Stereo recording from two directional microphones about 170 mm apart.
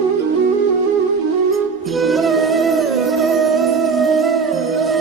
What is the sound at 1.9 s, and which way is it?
Music, centre (ahead or behind).